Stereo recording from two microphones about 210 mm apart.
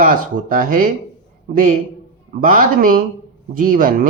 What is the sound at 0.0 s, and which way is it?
A man's voice, 40° right (ahead or behind).